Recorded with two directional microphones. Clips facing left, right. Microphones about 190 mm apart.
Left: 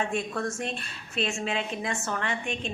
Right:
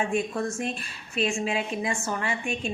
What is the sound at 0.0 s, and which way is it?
A woman's voice, 10° right (ahead or behind).